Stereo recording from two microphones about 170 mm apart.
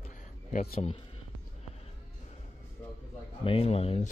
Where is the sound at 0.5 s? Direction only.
40° left (ahead or behind).